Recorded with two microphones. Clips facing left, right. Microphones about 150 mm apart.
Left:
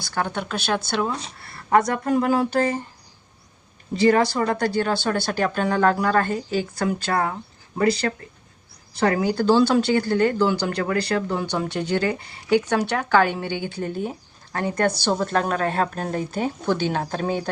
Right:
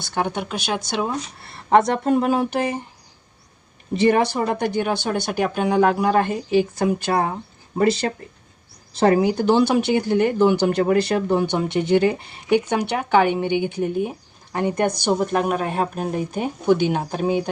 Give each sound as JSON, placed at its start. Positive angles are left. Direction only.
{"t": 0.0, "sound": "speech", "side_deg": -20}
{"t": 3.9, "sound": "speech", "side_deg": -20}
{"t": 9.0, "sound": "speech", "side_deg": -25}